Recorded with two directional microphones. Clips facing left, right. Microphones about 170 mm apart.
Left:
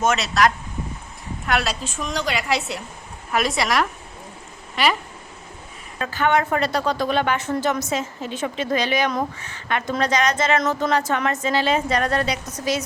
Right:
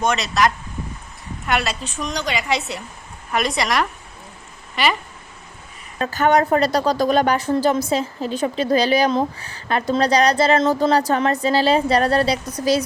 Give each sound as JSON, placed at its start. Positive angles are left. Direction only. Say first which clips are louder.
{"t": 0.0, "sound": "a woman's voice", "louder": "even", "side_deg": 0}
{"t": 6.0, "sound": "a woman's voice", "louder": "right 4 dB", "side_deg": -40}